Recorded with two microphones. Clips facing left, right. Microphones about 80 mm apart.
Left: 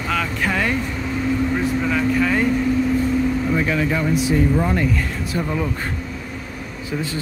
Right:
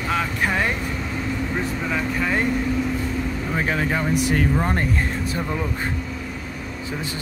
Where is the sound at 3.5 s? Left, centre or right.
Right.